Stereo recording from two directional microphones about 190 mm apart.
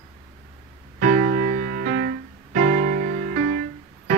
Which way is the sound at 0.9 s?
50° right (ahead or behind).